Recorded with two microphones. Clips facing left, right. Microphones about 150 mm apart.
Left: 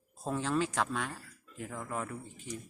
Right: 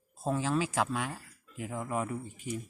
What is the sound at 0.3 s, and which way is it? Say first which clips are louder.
A man's voice: right 2 dB; 5° right (ahead or behind).